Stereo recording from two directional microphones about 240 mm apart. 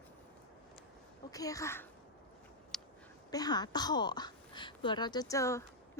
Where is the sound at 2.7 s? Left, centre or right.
Centre.